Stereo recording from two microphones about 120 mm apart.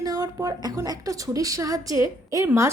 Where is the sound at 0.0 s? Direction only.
30° right (ahead or behind).